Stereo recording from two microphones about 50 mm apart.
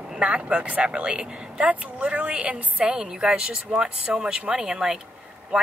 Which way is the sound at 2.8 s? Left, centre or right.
Centre.